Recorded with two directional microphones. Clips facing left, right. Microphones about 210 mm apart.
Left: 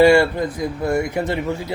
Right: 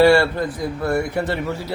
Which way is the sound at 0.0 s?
15° left (ahead or behind).